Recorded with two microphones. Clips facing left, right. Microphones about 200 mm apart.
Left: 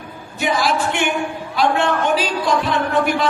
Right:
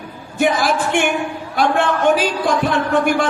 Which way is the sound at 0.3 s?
55° right (ahead or behind).